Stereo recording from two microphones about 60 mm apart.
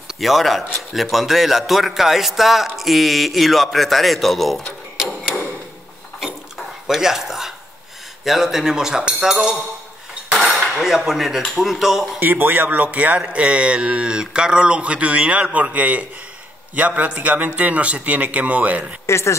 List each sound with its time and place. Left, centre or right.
0.2 s a man's voice: centre
4.9 s tick-tock: centre
6.1 s dishes: centre
8.2 s speech: centre
10.8 s a man's voice: centre
12.2 s speech: right
19.0 s a woman's voice: left